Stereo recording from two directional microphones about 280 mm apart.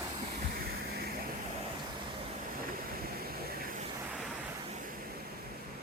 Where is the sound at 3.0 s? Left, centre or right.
Right.